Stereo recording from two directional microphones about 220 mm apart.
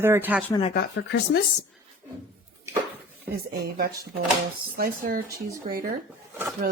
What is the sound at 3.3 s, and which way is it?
A woman's voice, 45° right (ahead or behind).